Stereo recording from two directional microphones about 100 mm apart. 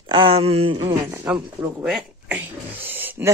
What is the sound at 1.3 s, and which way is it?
Speech, 20° right (ahead or behind).